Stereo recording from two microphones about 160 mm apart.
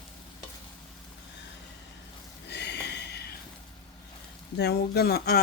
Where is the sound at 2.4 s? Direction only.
90° left.